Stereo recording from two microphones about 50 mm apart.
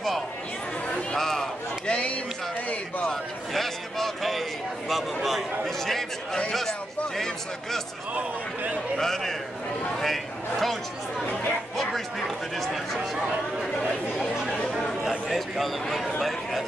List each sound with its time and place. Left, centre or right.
1.1 s a sound: centre
1.9 s a sound: left
3.5 s a sound: centre
8.1 s a man's voice: right
8.9 s a man's voice: centre
11.7 s music: centre
12.5 s speech: centre
14.2 s chatter: centre
15.0 s a man's voice: centre